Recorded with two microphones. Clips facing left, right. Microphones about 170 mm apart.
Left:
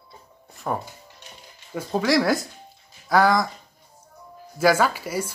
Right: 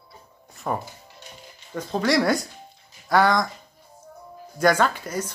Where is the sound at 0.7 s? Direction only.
Centre (ahead or behind).